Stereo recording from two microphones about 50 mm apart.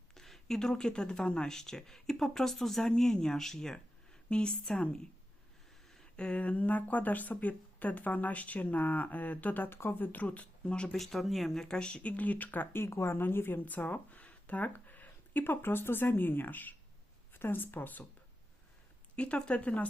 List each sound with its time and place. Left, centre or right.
0.1 s speech: centre
6.1 s speech: left
9.6 s speech: left
9.9 s speech: left
10.9 s speech: centre
11.9 s speech: left
12.7 s speech: left
13.7 s speech: left
19.1 s speech: left